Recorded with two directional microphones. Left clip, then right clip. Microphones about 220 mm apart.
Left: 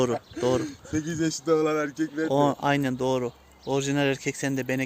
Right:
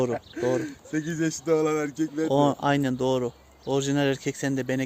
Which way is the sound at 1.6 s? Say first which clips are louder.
Even; 45° right (ahead or behind).